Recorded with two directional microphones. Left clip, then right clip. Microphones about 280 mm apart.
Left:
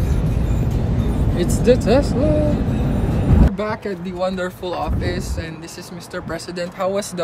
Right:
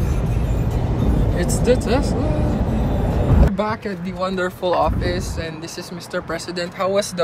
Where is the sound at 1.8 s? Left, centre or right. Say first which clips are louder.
Left 4 dB; centre.